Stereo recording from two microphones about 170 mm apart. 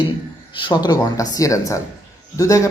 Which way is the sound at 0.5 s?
25° left (ahead or behind).